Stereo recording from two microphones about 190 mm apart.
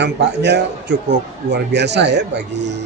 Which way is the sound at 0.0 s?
65° right (ahead or behind).